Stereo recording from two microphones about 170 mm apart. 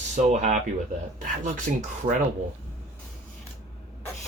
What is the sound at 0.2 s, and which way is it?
Speech, 45° right (ahead or behind).